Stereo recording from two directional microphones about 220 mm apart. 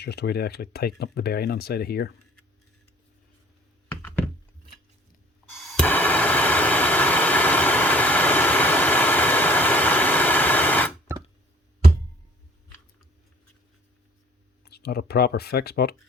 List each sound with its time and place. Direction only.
0.0 s speech: 50° left (ahead or behind)
5.5 s a sound: centre (ahead or behind)
14.6 s speech: 45° left (ahead or behind)